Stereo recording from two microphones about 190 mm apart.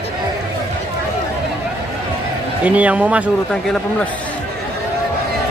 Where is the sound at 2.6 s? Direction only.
5° right (ahead or behind).